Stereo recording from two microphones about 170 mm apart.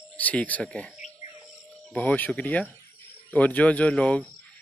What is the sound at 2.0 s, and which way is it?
Speech, 10° left (ahead or behind).